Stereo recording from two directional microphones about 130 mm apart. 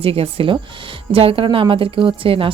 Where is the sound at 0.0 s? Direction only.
45° right (ahead or behind).